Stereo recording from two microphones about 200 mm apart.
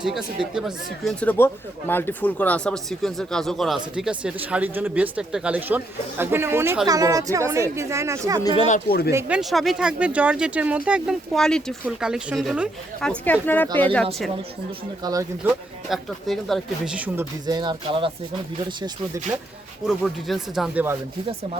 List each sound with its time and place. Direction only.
0.5 s speech: centre (ahead or behind); by 8.4 s 15° right (ahead or behind)
8.6 s speech: 45° left (ahead or behind)
9.1 s speech: 5° right (ahead or behind)
15.0 s speech: 15° right (ahead or behind)
15.9 s speech: centre (ahead or behind)
17.4 s speech: 20° right (ahead or behind)
19.9 s speech: centre (ahead or behind)